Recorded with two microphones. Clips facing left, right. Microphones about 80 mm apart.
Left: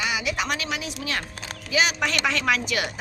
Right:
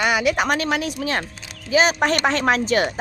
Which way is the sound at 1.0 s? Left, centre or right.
Right.